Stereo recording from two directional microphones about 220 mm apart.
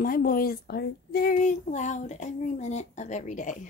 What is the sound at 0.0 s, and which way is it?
Speech, 40° left (ahead or behind).